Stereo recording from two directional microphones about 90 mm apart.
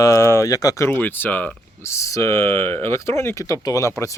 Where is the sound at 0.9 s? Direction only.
20° left (ahead or behind).